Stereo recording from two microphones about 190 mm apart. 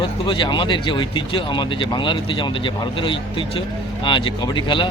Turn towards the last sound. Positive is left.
turn(degrees=25)  # may be behind; listen again after turning